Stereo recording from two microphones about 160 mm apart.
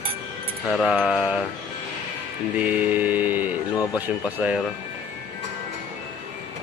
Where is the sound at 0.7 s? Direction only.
Centre (ahead or behind).